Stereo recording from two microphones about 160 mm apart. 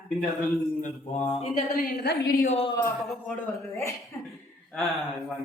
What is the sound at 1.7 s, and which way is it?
Speech, 70° left (ahead or behind).